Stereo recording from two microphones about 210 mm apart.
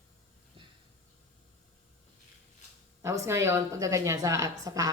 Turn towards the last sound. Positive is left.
turn(degrees=-15)  # may be behind; listen again after turning